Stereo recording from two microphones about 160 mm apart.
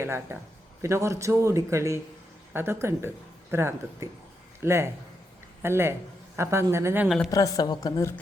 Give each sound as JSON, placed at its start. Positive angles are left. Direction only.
{"t": 0.0, "sound": "speech", "side_deg": -15}
{"t": 7.3, "sound": "a woman's voice", "side_deg": 20}